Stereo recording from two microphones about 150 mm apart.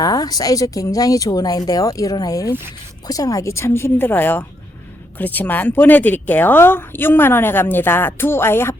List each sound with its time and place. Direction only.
0.0 s speech: 25° left (ahead or behind)